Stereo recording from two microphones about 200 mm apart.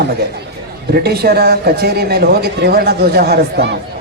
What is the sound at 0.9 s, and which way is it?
A man's voice, 50° right (ahead or behind).